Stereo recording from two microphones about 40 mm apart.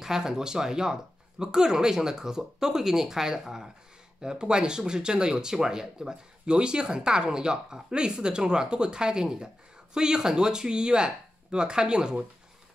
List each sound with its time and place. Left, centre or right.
0.0 s speech: centre